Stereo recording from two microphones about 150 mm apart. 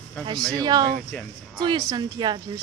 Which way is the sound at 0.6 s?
25° right (ahead or behind).